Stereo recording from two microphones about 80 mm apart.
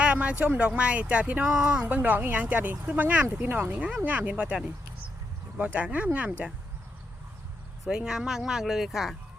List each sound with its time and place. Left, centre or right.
0.0 s speech: centre
7.9 s speech: centre